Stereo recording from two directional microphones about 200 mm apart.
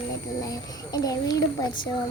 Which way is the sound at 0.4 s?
20° left (ahead or behind).